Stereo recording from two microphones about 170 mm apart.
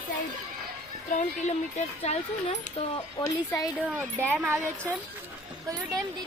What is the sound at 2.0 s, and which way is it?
Speech, 40° left (ahead or behind).